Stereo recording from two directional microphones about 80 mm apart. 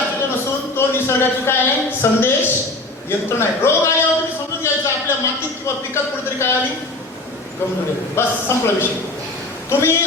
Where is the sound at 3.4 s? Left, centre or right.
Left.